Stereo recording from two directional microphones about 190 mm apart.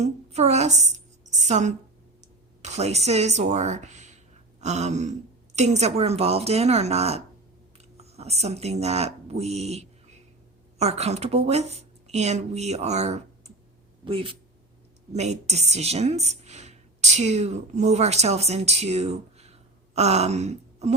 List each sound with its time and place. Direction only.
0.0 s a woman's voice: 35° right (ahead or behind)